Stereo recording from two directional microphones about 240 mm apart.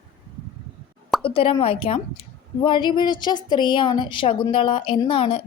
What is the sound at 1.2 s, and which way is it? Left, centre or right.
A woman's voice, left.